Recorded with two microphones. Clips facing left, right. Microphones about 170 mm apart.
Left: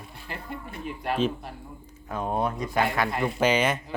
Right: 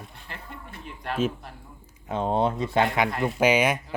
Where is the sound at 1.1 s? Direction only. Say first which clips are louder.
Even; 5° right (ahead or behind).